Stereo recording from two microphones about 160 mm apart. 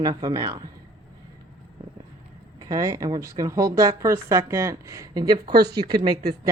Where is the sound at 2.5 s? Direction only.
20° right (ahead or behind).